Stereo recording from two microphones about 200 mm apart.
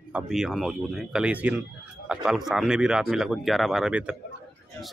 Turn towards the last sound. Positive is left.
turn(degrees=-5)  # may be behind; listen again after turning